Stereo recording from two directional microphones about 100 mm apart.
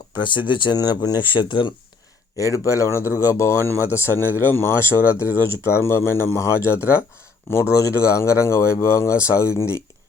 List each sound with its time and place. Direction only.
0.2 s speech: 50° left (ahead or behind)
2.4 s speech: 30° left (ahead or behind)